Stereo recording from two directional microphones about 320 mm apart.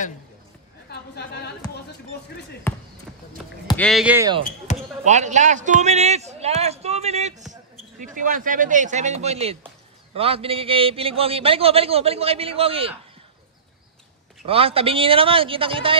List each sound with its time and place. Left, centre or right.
0.8 s a woman's voice: left
3.6 s speech: centre
4.7 s basketball bounce: left
5.0 s a man's voice: right
14.4 s a man's voice: centre